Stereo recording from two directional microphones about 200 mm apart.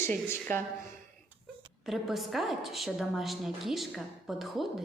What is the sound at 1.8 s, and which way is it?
A woman's voice, centre (ahead or behind).